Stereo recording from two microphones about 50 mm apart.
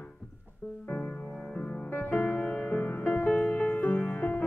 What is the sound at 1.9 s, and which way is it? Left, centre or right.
Music, left.